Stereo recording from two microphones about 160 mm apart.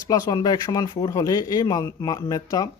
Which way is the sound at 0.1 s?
25° left (ahead or behind).